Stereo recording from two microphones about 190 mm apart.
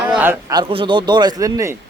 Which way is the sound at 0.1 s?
10° right (ahead or behind).